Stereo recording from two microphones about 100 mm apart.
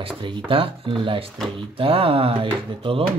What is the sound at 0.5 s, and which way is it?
Speech, 60° right (ahead or behind).